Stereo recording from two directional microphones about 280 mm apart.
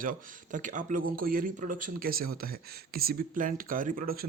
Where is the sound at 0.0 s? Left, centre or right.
Right.